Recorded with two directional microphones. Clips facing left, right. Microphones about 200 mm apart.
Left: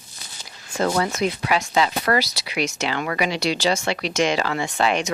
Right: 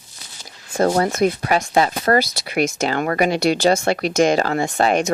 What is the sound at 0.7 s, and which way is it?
Speech, 40° right (ahead or behind).